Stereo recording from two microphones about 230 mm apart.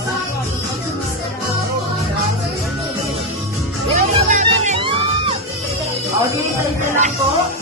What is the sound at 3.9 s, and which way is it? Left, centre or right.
Music, right.